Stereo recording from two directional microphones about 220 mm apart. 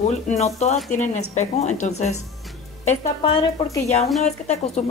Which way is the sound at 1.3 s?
30° left (ahead or behind).